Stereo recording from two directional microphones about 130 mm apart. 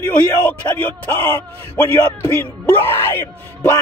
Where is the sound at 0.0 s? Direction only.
15° left (ahead or behind).